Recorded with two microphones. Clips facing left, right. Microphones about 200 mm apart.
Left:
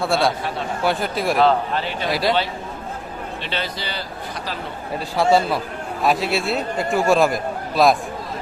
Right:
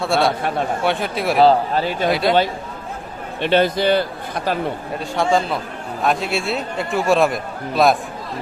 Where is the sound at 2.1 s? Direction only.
Centre (ahead or behind).